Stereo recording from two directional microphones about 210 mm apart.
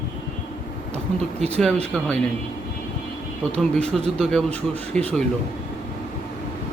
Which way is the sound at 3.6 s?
5° left (ahead or behind).